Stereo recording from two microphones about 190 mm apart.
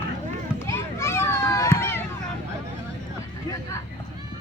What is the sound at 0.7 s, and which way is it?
Children playing, 15° left (ahead or behind).